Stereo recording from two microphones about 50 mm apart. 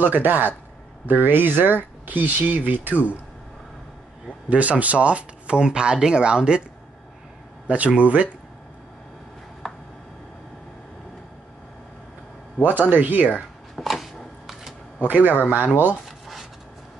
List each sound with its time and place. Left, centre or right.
0.0 s speech: right
4.5 s speech: right
7.6 s speech: right
12.6 s speech: right
13.8 s a sound: centre
15.0 s speech: right